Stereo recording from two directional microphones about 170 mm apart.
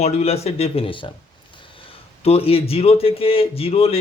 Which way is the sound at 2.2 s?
35° left (ahead or behind).